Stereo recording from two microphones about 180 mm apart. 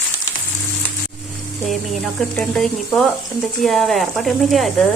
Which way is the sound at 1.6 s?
Centre (ahead or behind).